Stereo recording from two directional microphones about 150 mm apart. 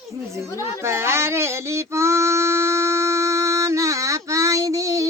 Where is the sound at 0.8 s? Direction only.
15° right (ahead or behind).